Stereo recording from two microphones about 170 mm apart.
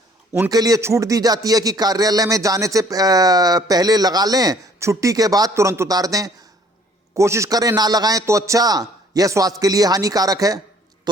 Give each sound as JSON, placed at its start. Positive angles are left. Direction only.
{"t": 0.5, "sound": "speech", "side_deg": -20}